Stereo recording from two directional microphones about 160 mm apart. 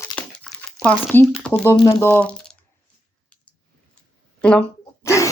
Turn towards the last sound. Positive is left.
turn(degrees=20)  # may be behind; listen again after turning